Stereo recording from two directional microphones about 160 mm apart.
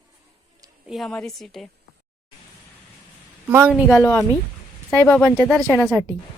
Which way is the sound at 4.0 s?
15° left (ahead or behind).